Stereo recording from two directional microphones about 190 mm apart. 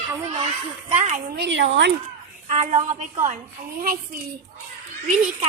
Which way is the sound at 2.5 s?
35° right (ahead or behind).